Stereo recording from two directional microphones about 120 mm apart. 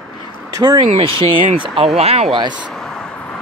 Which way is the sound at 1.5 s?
55° right (ahead or behind).